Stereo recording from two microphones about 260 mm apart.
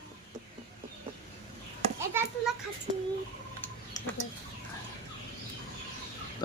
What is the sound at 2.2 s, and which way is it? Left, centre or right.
Children playing, centre.